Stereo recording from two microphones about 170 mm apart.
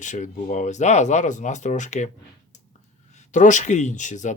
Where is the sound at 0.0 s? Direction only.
45° left (ahead or behind).